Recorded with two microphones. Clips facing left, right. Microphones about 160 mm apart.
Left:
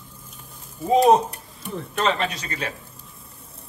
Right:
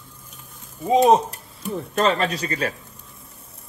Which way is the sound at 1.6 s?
40° right (ahead or behind).